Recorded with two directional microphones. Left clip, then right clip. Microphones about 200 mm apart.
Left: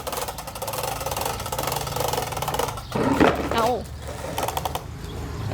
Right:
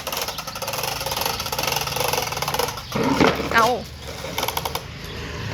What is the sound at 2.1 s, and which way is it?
Engine, centre (ahead or behind).